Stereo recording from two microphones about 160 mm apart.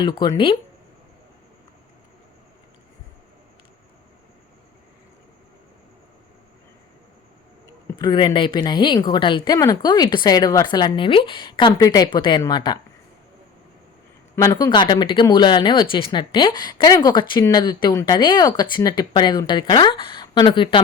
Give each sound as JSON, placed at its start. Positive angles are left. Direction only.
{"t": 0.0, "sound": "speech", "side_deg": 25}
{"t": 7.9, "sound": "speech", "side_deg": 25}
{"t": 14.3, "sound": "speech", "side_deg": 20}